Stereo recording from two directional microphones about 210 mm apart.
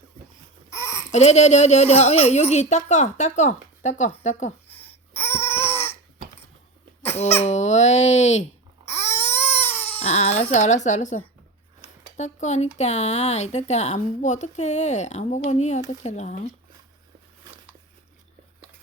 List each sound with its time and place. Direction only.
0.7 s babbling: 15° left (ahead or behind)
1.1 s a woman's voice: 30° left (ahead or behind)
4.8 s a sound: 10° left (ahead or behind)
7.2 s a woman's voice: 30° left (ahead or behind)
8.9 s a sound: 30° left (ahead or behind)
9.4 s baby cry: 10° left (ahead or behind)
10.0 s a woman's voice: 30° left (ahead or behind)